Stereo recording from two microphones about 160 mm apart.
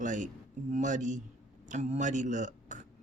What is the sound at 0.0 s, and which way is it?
A man's voice, 50° right (ahead or behind).